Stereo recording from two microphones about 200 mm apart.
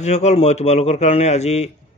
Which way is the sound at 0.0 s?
35° left (ahead or behind).